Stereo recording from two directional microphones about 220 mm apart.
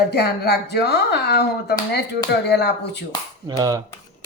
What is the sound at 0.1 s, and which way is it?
Speech, 45° left (ahead or behind).